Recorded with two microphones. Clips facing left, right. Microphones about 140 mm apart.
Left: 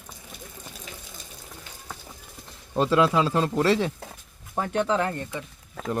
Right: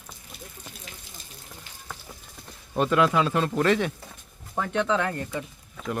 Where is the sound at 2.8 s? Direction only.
30° left (ahead or behind).